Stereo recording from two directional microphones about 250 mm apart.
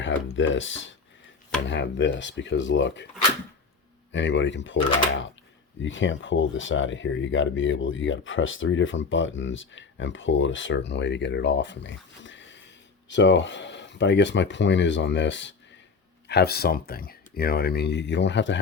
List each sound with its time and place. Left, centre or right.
0.0 s speech: left
4.1 s speech: left